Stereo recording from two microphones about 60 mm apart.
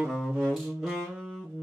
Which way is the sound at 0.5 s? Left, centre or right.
Centre.